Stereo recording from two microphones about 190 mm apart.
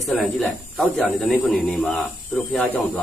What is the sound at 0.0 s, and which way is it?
Speech, centre (ahead or behind).